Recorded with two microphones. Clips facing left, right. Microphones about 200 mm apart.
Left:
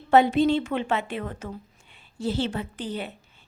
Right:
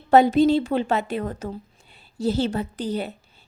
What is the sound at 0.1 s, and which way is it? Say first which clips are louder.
Speech: right 3 dB; 40° right (ahead or behind).